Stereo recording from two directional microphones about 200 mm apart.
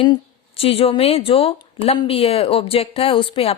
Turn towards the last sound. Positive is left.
turn(degrees=25)  # may be behind; listen again after turning